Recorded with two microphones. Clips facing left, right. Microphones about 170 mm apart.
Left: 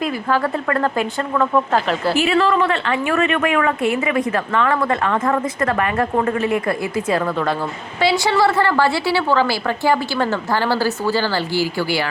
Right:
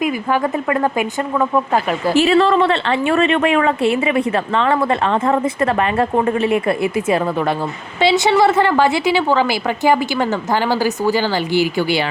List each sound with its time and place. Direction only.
0.0 s a woman's voice: 15° right (ahead or behind)
2.1 s a woman's voice: 35° right (ahead or behind)